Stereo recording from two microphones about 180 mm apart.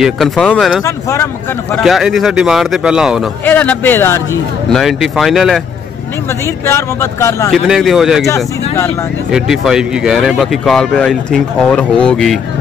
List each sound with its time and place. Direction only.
0.0 s speech: centre (ahead or behind)
0.8 s speech: 15° left (ahead or behind)
1.8 s speech: centre (ahead or behind)
3.4 s speech: 10° left (ahead or behind)
4.7 s speech: centre (ahead or behind)
6.4 s speech: 15° left (ahead or behind)
7.5 s speech: centre (ahead or behind)
9.3 s speech: 5° right (ahead or behind)